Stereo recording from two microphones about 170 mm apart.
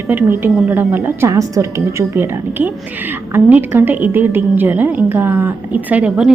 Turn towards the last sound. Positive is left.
turn(degrees=-10)  # may be behind; listen again after turning